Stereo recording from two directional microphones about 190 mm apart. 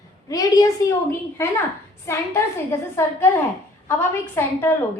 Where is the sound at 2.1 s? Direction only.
15° left (ahead or behind).